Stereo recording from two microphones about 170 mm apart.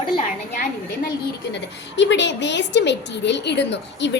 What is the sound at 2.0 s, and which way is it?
A woman's voice, 90° left.